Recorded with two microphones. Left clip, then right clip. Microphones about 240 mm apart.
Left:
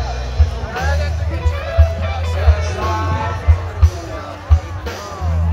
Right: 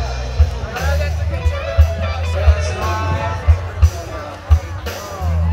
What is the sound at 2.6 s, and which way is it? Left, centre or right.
Music, right.